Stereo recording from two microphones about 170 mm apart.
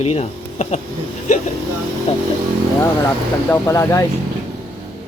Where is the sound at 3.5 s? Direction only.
15° left (ahead or behind).